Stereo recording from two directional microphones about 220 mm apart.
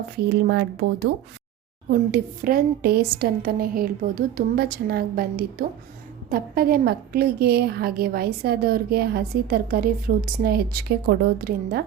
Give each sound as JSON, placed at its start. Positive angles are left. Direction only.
{"t": 0.2, "sound": "a woman's voice", "side_deg": -50}
{"t": 1.9, "sound": "a woman's voice", "side_deg": -45}